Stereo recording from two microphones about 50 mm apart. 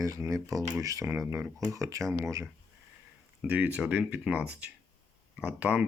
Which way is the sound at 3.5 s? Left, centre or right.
Right.